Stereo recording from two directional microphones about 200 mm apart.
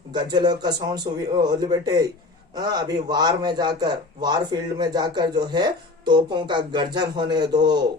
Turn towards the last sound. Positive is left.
turn(degrees=-20)  # may be behind; listen again after turning